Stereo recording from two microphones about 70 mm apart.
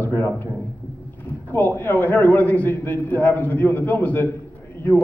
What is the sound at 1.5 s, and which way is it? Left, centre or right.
A man's voice, left.